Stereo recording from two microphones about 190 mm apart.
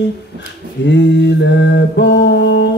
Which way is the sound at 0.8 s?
65° left (ahead or behind).